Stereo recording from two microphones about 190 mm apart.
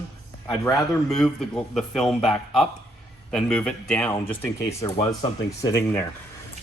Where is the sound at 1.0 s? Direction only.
Centre (ahead or behind).